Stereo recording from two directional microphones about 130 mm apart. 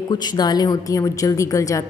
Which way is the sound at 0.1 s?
30° left (ahead or behind).